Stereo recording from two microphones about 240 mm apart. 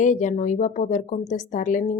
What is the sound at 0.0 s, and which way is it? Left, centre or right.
A woman's voice, left.